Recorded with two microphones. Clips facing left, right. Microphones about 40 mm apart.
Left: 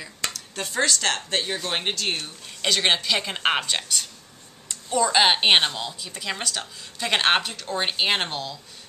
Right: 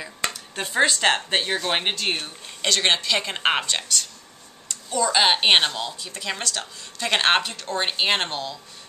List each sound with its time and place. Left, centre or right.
0.0 s a sound: centre
1.4 s speech: centre
2.6 s a woman's voice: centre